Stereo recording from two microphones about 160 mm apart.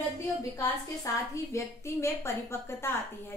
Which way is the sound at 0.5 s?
20° left (ahead or behind).